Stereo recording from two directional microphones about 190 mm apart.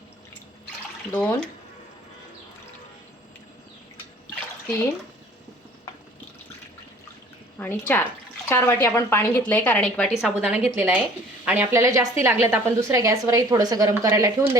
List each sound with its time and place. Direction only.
1.1 s speech: 5° left (ahead or behind)
7.6 s a woman's voice: 10° left (ahead or behind); by 14.4 s 20° right (ahead or behind)